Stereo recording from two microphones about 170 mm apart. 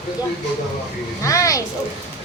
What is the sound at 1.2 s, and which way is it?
Speech, 20° left (ahead or behind).